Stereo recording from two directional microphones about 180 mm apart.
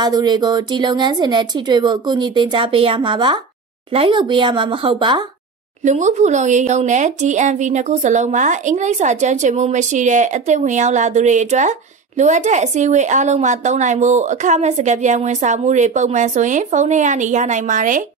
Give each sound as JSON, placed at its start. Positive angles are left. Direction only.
{"t": 0.0, "sound": "speech", "side_deg": -25}
{"t": 5.9, "sound": "a woman's voice", "side_deg": -40}